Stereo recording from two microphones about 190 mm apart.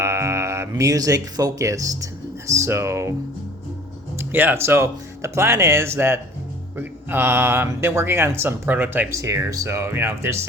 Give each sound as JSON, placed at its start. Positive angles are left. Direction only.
{"t": 0.0, "sound": "speech", "side_deg": -15}
{"t": 4.2, "sound": "speech", "side_deg": -10}